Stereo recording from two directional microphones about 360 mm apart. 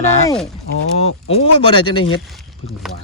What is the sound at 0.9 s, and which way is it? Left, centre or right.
Speech, centre.